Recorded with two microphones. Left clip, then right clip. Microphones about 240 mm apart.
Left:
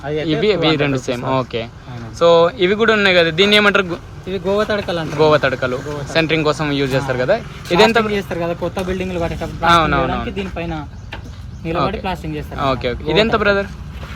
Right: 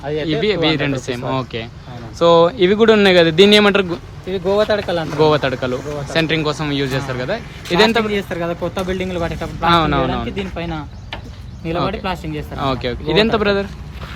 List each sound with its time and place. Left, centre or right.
0.3 s speech: centre
4.5 s speech: left
5.1 s speech: centre
8.0 s speech: centre
12.5 s speech: centre